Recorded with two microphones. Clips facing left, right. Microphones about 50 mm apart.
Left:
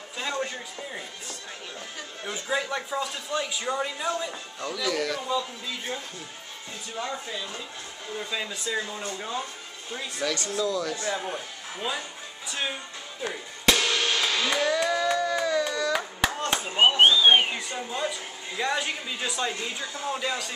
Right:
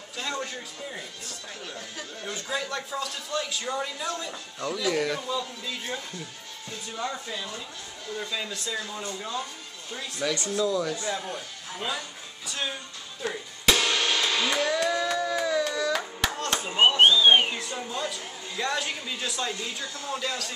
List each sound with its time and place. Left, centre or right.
0.2 s speech: centre
2.2 s speech: centre
4.7 s speech: centre
7.0 s speech: centre
10.6 s speech: centre
11.1 s speech: centre
13.7 s a sound: centre
16.5 s speech: centre